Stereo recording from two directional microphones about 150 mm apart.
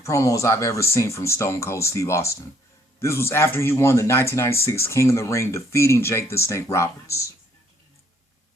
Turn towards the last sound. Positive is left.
turn(degrees=20)  # may be behind; listen again after turning